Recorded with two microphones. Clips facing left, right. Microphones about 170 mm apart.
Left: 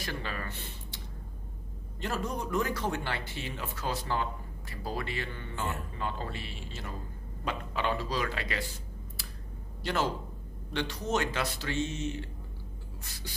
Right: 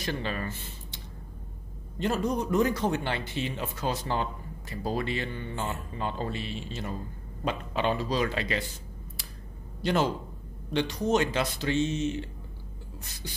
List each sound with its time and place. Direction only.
0.0 s speech: 20° right (ahead or behind)
0.5 s speech: 65° left (ahead or behind)
2.0 s a man's voice: 20° right (ahead or behind)
9.8 s a man's voice: 20° right (ahead or behind)